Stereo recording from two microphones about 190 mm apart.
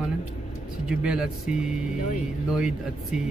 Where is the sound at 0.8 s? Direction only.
5° right (ahead or behind).